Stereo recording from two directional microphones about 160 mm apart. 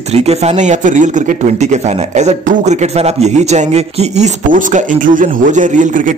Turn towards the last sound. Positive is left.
turn(degrees=-55)  # may be behind; listen again after turning